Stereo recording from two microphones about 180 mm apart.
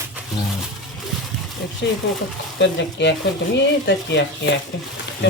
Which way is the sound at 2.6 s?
75° left (ahead or behind).